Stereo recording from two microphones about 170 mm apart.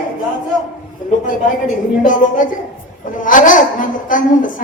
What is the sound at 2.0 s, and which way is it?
A woman's voice, 50° left (ahead or behind).